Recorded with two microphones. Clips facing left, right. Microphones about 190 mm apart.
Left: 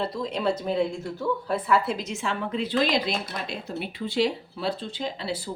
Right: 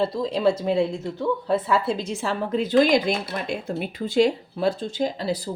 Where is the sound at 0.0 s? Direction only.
30° right (ahead or behind).